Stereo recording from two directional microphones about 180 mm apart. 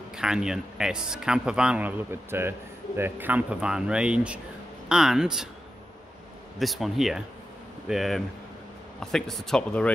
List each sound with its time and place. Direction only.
0.1 s speech: 5° right (ahead or behind)
6.6 s speech: centre (ahead or behind)